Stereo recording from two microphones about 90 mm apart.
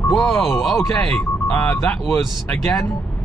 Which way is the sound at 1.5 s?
20° left (ahead or behind).